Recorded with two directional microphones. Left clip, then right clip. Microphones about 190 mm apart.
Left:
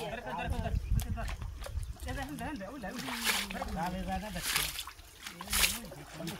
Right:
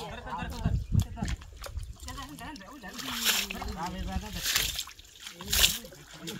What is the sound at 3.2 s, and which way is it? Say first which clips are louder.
Speech: right 4 dB; 30° right (ahead or behind).